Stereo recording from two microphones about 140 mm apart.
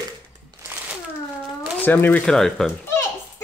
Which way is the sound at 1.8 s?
15° left (ahead or behind).